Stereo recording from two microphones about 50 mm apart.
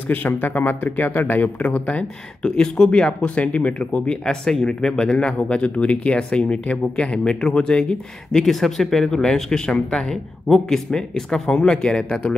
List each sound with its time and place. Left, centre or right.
0.1 s speech: left
2.4 s speech: centre